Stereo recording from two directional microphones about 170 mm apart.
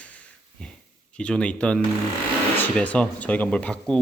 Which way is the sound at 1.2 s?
5° left (ahead or behind).